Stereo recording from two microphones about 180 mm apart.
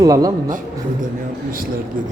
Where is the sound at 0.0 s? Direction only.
20° right (ahead or behind).